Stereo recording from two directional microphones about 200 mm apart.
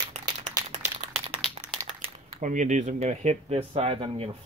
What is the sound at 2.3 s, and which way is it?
Speech, 40° right (ahead or behind).